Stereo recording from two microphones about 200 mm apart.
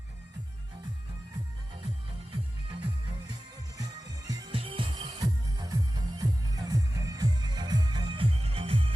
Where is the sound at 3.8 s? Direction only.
20° right (ahead or behind).